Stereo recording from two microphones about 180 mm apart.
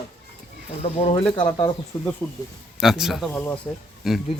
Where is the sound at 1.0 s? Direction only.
30° left (ahead or behind).